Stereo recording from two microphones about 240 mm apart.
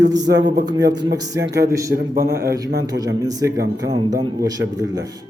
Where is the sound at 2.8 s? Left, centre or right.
Centre.